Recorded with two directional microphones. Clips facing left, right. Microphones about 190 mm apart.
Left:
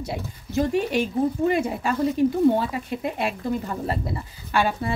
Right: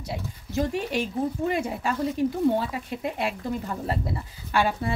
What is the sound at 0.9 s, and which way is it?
Speech, 55° left (ahead or behind).